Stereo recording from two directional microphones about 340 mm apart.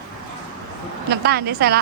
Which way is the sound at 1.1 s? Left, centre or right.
Right.